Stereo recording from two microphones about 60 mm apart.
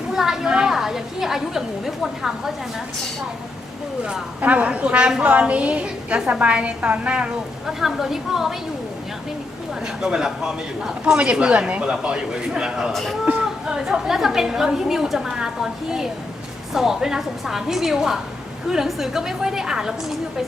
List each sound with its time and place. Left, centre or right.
0.1 s a sound: centre
4.4 s a woman's voice: right
7.7 s a woman's voice: centre
9.8 s a woman's voice: centre
11.0 s a woman's voice: centre
12.9 s a woman's voice: centre
13.2 s a sound: centre
13.8 s a woman's voice: centre